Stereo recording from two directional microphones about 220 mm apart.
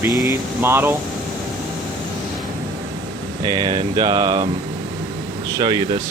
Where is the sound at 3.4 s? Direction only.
20° right (ahead or behind).